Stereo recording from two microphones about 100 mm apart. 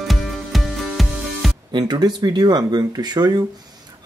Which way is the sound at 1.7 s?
45° right (ahead or behind).